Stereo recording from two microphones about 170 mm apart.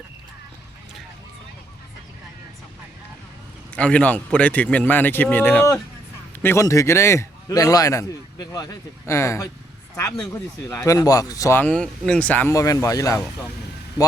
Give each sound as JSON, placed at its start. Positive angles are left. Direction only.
{"t": 3.8, "sound": "a man's voice", "side_deg": 5}
{"t": 10.8, "sound": "a man's voice", "side_deg": 20}